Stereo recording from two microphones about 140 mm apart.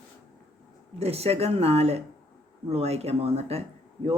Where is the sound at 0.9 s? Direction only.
45° right (ahead or behind).